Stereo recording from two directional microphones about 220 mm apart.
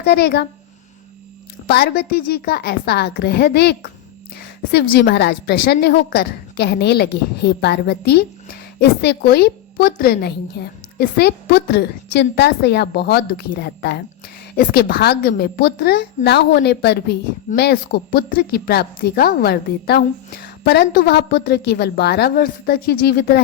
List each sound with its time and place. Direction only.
0.0 s a woman's voice: 45° left (ahead or behind)
1.6 s a woman's voice: 45° left (ahead or behind)